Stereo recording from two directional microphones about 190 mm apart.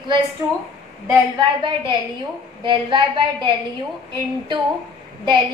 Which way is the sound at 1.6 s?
25° right (ahead or behind).